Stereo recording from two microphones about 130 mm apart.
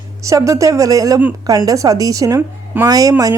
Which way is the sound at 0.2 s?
25° right (ahead or behind).